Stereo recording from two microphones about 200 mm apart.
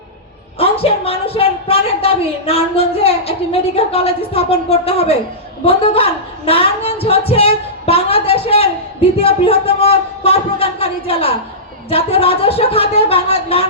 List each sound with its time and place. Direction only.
0.6 s a woman's voice: 30° left (ahead or behind)